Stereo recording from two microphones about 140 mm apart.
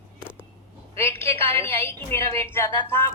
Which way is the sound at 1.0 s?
40° right (ahead or behind).